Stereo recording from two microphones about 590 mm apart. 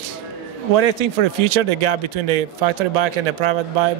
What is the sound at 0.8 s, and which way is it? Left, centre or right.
Speech, right.